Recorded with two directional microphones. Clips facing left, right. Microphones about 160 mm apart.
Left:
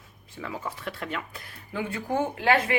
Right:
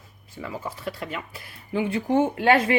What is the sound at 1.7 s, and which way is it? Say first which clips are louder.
Speech: right 6 dB; 20° right (ahead or behind).